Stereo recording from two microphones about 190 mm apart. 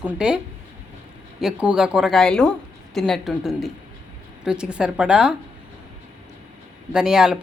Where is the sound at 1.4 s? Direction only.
5° right (ahead or behind).